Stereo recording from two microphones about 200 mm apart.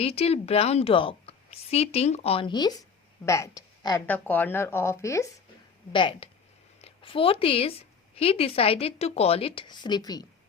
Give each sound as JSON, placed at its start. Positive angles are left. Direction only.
{"t": 0.0, "sound": "a woman's voice", "side_deg": 30}